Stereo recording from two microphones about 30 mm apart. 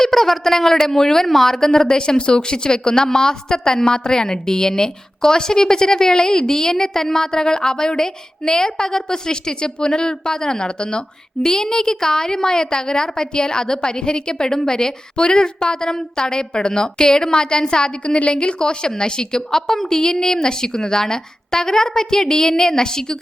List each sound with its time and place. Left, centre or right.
0.0 s speech: centre
2.0 s a woman's voice: left